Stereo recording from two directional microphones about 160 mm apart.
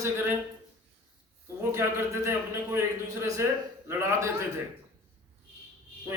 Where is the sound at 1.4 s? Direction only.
15° right (ahead or behind).